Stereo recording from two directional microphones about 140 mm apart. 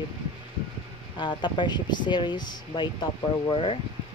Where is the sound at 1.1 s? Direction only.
35° left (ahead or behind).